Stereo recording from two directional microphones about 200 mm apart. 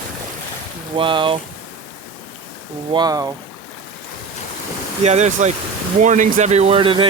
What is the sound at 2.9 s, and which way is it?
Speech, 20° right (ahead or behind).